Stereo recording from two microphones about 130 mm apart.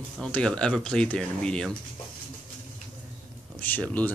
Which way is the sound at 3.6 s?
10° left (ahead or behind).